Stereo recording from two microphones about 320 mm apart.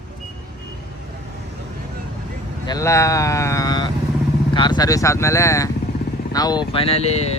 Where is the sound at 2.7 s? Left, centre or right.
Centre.